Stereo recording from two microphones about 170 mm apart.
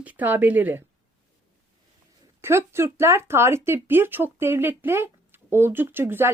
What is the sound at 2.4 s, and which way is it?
Speech, 15° right (ahead or behind).